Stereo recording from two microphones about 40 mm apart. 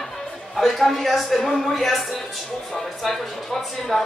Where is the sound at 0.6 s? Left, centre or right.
Centre.